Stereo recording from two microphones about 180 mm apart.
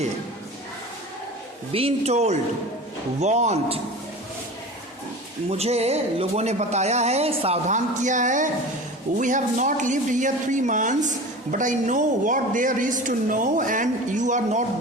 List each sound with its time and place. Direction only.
1.7 s speech: 35° right (ahead or behind)
5.5 s speech: 35° right (ahead or behind)